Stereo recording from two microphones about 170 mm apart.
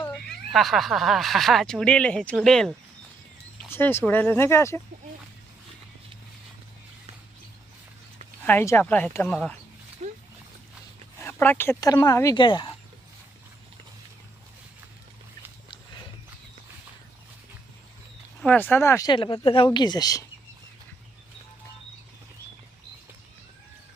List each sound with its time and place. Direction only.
0.5 s speech: centre (ahead or behind); by 4.8 s 15° left (ahead or behind)
8.4 s speech: 15° left (ahead or behind)
10.0 s dog: 45° right (ahead or behind)
11.2 s speech: 15° left (ahead or behind); by 12.7 s 30° left (ahead or behind)
18.3 s speech: 10° left (ahead or behind)
19.1 s speech: 30° left (ahead or behind)